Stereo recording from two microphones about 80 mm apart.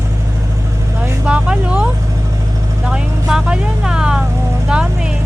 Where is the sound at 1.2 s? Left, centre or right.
Centre.